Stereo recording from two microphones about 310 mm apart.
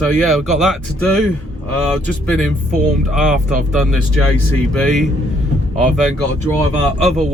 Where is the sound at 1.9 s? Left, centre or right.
Centre.